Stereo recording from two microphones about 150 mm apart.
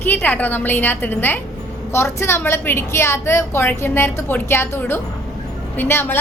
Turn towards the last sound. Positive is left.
turn(degrees=15)  # may be behind; listen again after turning